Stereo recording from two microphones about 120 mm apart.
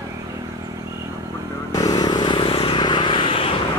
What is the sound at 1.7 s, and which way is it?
Vehicle, 30° left (ahead or behind).